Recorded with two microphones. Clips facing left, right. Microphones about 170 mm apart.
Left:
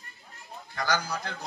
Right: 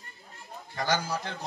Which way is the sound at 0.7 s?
25° right (ahead or behind).